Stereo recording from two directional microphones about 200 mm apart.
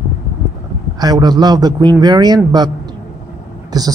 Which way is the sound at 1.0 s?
20° right (ahead or behind).